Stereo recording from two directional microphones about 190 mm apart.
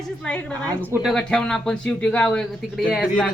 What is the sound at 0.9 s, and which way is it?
Speech, 5° right (ahead or behind).